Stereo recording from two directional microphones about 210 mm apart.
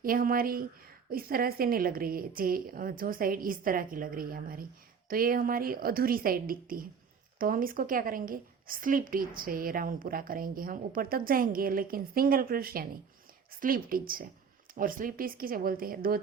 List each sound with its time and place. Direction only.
0.0 s a woman's voice: 45° right (ahead or behind)